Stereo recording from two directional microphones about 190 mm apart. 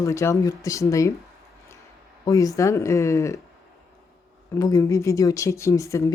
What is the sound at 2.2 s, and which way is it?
Speech, 15° left (ahead or behind).